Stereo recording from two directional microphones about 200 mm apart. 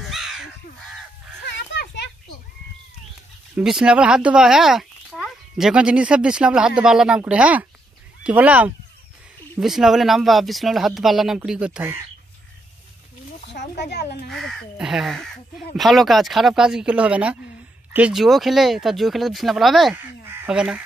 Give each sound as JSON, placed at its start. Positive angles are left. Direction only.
{"t": 0.1, "sound": "crow", "side_deg": 0}
{"t": 1.7, "sound": "children playing", "side_deg": 60}
{"t": 3.5, "sound": "speech", "side_deg": -5}
{"t": 13.5, "sound": "a sound", "side_deg": 60}
{"t": 14.3, "sound": "speech", "side_deg": 0}